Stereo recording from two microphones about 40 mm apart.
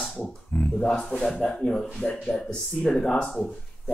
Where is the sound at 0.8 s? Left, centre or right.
Centre.